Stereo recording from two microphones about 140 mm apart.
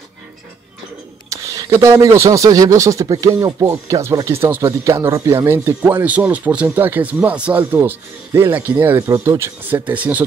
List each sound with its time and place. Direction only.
1.3 s speech: 25° right (ahead or behind)